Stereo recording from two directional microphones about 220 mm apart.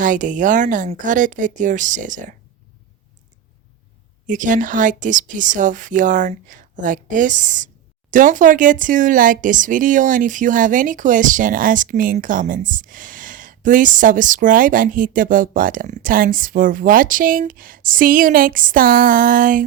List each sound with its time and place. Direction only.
0.0 s speech: 35° right (ahead or behind)
4.3 s speech: 35° right (ahead or behind)